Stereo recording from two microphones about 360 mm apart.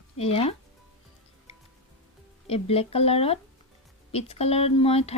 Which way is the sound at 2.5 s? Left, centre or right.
Centre.